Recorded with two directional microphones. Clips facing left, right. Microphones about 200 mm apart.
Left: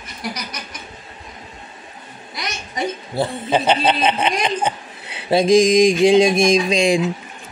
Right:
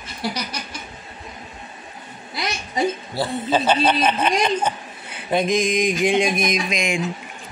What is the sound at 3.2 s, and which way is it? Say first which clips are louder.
A woman's voice: left 2 dB; 15° left (ahead or behind).